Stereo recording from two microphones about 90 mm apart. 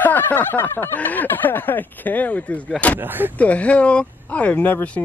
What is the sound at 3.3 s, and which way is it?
Speech, 15° left (ahead or behind).